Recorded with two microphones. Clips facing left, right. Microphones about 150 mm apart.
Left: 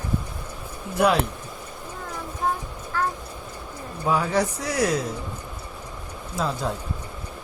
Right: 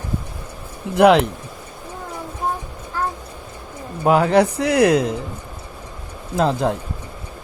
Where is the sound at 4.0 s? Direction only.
75° right (ahead or behind).